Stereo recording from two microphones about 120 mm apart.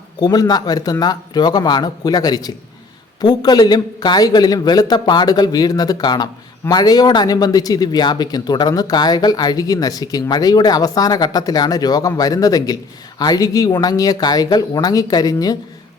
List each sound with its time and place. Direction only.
0.2 s speech: 35° left (ahead or behind)